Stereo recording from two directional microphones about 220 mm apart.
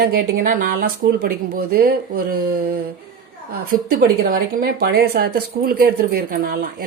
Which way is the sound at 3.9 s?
45° right (ahead or behind).